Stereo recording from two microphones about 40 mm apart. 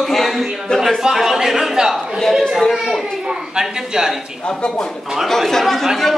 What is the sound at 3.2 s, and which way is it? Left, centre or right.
Speech, centre.